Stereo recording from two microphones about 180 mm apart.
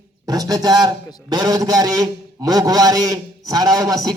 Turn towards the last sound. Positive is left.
turn(degrees=-20)  # may be behind; listen again after turning